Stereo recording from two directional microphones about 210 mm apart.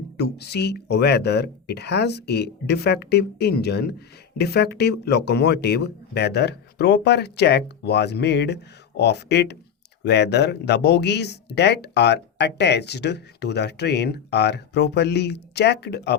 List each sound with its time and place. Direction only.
0.2 s speech: 50° left (ahead or behind)